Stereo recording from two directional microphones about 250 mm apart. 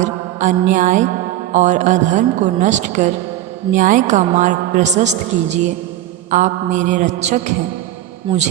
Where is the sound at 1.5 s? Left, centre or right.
Right.